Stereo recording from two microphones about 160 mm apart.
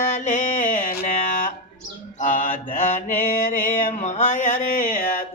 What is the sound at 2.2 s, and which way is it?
Mantra, 55° left (ahead or behind).